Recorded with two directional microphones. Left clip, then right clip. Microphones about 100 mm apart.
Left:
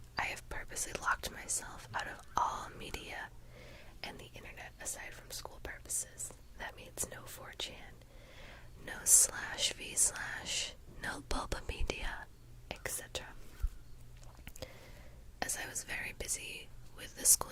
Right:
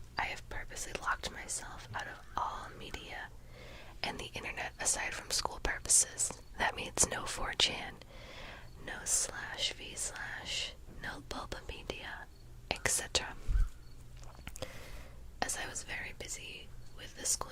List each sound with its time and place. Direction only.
0.2 s speech: 40° left (ahead or behind)
3.6 s whispering: 20° left (ahead or behind)
3.8 s whispering: centre (ahead or behind)
4.2 s speech: 15° right (ahead or behind)
4.5 s speech: 25° right (ahead or behind)
8.3 s a sound: centre (ahead or behind)
8.8 s speech: 25° left (ahead or behind)
12.6 s speech: 5° right (ahead or behind)
14.4 s a sound: 15° left (ahead or behind)
15.4 s speech: 20° left (ahead or behind); by 17.5 s 45° left (ahead or behind)